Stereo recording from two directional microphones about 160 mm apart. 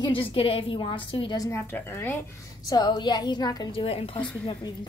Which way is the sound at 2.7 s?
25° left (ahead or behind).